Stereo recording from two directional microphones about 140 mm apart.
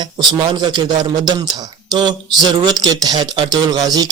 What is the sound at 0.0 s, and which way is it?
Speech, 30° right (ahead or behind).